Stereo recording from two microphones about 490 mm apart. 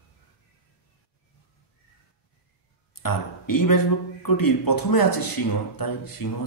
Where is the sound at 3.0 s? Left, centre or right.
Left.